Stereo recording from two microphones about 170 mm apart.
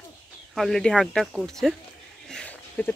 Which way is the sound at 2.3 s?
5° left (ahead or behind).